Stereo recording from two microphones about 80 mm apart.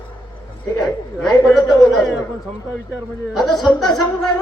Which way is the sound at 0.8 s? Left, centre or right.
Centre.